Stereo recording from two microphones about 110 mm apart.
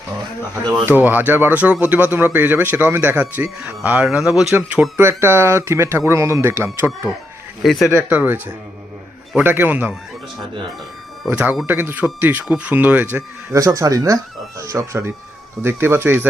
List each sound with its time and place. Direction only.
0.9 s speech: 15° right (ahead or behind)
7.6 s speech: centre (ahead or behind)
8.1 s speech: 15° right (ahead or behind)
9.4 s speech: 15° right (ahead or behind)
11.3 s speech: 15° right (ahead or behind)
13.5 s speech: 30° right (ahead or behind)